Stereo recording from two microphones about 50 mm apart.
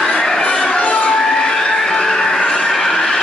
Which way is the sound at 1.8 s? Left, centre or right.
Centre.